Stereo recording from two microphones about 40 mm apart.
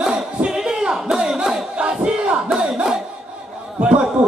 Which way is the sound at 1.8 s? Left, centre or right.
Right.